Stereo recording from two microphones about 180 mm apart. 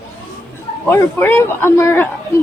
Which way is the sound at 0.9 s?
15° left (ahead or behind).